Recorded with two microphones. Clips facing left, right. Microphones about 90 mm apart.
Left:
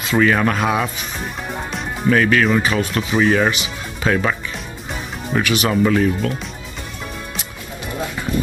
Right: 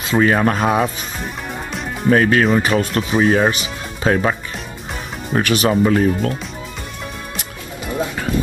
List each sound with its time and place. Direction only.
0.0 s speech: 35° right (ahead or behind)
2.0 s speech: 35° right (ahead or behind)